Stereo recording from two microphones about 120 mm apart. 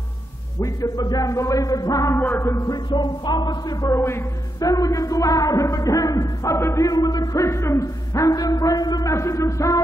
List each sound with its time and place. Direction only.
0.6 s speech: 25° left (ahead or behind)
2.5 s speech: 35° left (ahead or behind)